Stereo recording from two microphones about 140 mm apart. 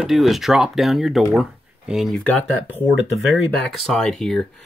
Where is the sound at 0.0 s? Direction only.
Centre (ahead or behind).